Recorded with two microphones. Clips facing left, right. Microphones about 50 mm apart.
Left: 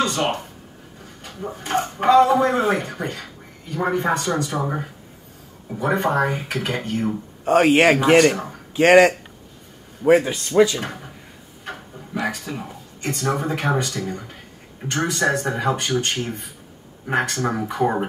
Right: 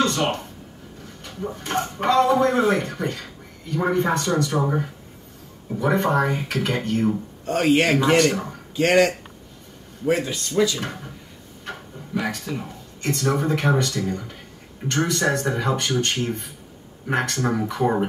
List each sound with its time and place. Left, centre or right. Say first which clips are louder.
0.0 s a sound: even; centre
1.2 s speech: even; centre
7.5 s speech: left 4 dB; left
8.3 s speech: left 2 dB; centre
8.7 s speech: left 5 dB; left
10.8 s speech: even; centre